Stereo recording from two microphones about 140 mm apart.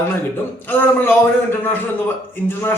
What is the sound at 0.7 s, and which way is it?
Speech, 15° left (ahead or behind).